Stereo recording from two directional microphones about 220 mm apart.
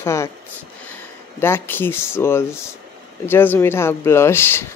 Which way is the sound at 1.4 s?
10° left (ahead or behind).